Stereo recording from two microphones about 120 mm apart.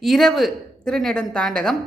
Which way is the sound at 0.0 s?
5° left (ahead or behind).